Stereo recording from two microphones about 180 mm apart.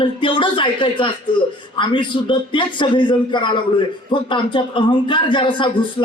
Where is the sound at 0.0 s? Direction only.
30° left (ahead or behind).